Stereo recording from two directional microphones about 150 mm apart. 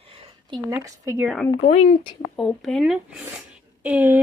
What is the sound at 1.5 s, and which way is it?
Speech, 40° left (ahead or behind).